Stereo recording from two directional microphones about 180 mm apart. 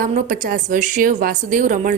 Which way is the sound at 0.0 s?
50° right (ahead or behind).